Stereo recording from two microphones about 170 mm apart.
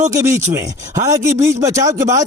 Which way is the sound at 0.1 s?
20° right (ahead or behind).